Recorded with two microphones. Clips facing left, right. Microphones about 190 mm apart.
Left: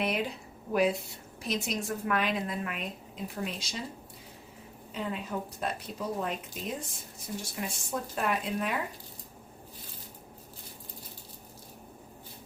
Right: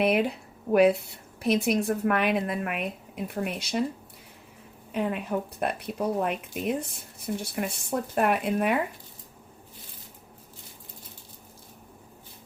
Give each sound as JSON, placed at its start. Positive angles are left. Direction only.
{"t": 0.0, "sound": "a woman's voice", "side_deg": -60}
{"t": 4.9, "sound": "a woman's voice", "side_deg": -60}